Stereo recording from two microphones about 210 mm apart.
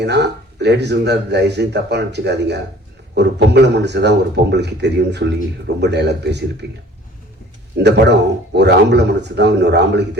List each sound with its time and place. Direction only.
0.0 s speech: 55° right (ahead or behind)
7.8 s speech: 55° right (ahead or behind)